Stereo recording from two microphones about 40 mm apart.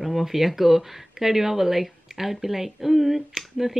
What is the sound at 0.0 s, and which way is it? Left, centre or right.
Speech, centre.